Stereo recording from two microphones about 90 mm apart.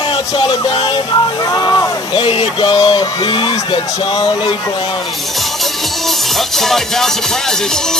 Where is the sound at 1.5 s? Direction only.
40° left (ahead or behind).